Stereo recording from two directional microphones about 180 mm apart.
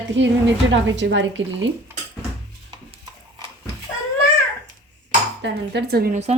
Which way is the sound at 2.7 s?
25° right (ahead or behind).